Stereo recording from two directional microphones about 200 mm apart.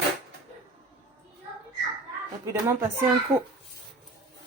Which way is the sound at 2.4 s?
10° right (ahead or behind).